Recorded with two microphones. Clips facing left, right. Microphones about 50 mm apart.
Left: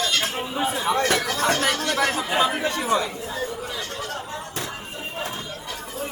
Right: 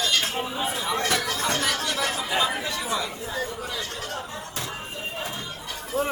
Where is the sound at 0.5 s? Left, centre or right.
Centre.